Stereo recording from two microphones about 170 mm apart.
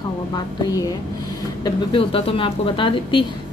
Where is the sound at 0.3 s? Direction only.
20° left (ahead or behind).